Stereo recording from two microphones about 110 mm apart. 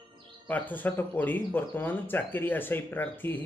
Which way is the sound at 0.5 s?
15° left (ahead or behind).